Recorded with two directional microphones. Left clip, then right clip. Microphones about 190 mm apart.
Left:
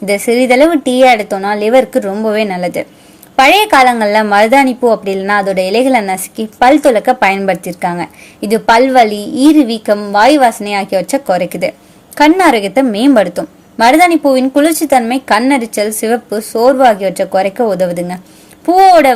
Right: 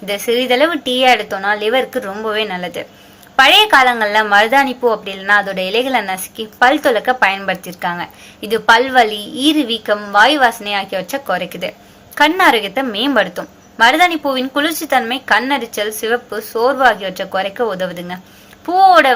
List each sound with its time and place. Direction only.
0.0 s a woman's voice: 45° left (ahead or behind)